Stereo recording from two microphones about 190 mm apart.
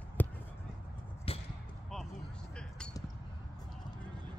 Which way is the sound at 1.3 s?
30° left (ahead or behind).